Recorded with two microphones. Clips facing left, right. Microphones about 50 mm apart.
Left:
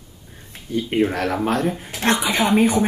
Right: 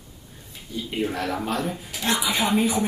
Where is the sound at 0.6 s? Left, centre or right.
Left.